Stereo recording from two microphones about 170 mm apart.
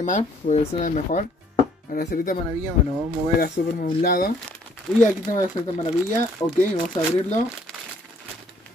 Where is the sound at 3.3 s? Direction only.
60° left (ahead or behind).